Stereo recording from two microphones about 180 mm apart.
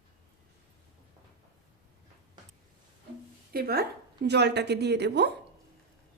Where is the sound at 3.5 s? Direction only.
60° right (ahead or behind).